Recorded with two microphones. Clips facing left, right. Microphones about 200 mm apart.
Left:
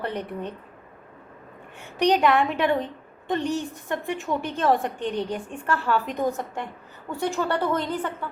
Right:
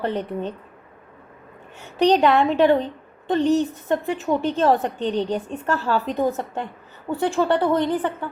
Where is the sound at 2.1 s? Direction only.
25° right (ahead or behind).